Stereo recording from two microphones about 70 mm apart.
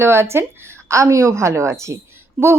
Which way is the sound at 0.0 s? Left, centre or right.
Right.